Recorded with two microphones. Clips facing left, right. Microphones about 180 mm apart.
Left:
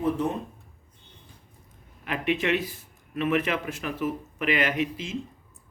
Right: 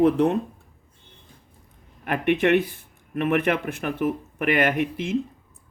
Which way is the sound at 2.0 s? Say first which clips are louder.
Right 6 dB; 55° right (ahead or behind).